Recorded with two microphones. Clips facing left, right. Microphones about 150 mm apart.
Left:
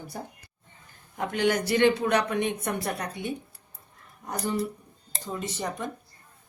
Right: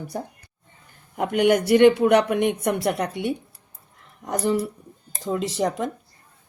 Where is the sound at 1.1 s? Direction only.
60° right (ahead or behind).